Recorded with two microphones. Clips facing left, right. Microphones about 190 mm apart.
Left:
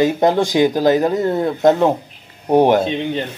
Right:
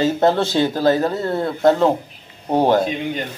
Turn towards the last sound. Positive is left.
turn(degrees=25)  # may be behind; listen again after turning